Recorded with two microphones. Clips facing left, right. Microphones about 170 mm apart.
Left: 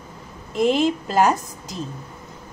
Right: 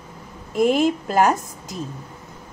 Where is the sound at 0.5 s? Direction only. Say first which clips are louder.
Right 1 dB; 50° right (ahead or behind).